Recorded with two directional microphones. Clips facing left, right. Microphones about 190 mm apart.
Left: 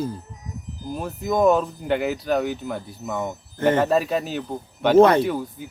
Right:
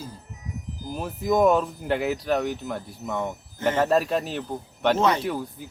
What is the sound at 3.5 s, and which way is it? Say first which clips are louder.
Speech: left 6 dB; 55° left (ahead or behind).